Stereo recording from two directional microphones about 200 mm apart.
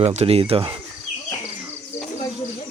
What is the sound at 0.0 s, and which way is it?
Speech, 30° right (ahead or behind).